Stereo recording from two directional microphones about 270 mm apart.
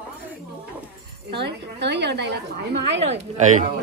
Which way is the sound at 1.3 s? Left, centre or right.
Right.